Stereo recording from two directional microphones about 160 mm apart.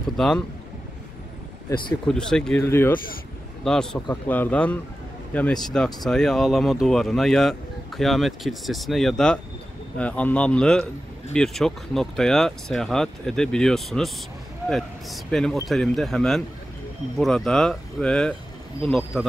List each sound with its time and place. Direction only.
0.2 s speech: 5° left (ahead or behind)
2.0 s speech: 5° left (ahead or behind)
2.6 s speech: 15° left (ahead or behind)
3.6 s speech: 5° left (ahead or behind)